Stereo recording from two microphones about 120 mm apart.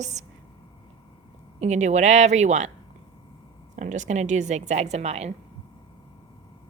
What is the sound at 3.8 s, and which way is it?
A woman's voice, 90° right.